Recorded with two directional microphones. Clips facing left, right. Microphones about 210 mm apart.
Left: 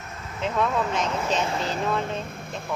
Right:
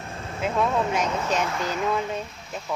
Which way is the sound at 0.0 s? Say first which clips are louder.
Right 4 dB; 30° right (ahead or behind).